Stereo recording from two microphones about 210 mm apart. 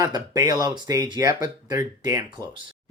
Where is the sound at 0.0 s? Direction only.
15° right (ahead or behind).